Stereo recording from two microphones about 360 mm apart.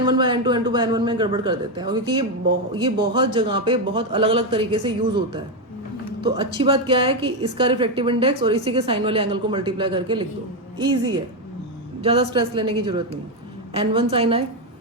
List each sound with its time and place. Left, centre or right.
0.0 s a woman's voice: centre
12.0 s a woman's voice: centre